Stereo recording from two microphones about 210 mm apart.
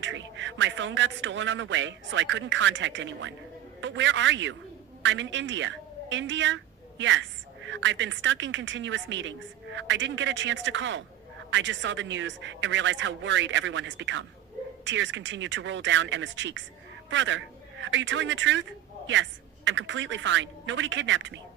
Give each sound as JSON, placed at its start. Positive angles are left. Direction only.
{"t": 0.0, "sound": "a man's voice", "side_deg": -60}